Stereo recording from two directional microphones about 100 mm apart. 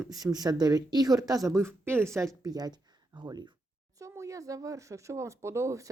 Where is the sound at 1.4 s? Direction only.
25° right (ahead or behind); by 3.5 s 45° right (ahead or behind).